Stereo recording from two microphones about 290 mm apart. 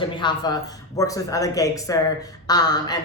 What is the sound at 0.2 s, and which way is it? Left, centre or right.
A woman's voice, centre.